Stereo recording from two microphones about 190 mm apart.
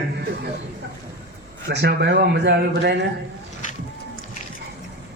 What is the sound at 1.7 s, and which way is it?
A man's voice, 60° right (ahead or behind).